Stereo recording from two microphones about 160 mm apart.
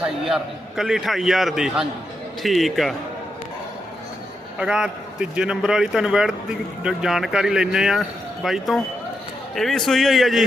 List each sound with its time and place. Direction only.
0.0 s a man's voice: 5° right (ahead or behind)
4.5 s a man's voice: 5° right (ahead or behind)